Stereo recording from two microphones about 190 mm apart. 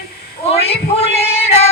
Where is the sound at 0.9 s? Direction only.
30° left (ahead or behind).